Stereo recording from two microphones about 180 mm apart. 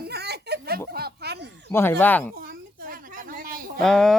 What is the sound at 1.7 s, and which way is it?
Speech, 10° left (ahead or behind).